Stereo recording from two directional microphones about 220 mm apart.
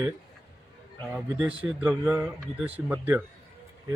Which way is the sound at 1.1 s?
5° right (ahead or behind).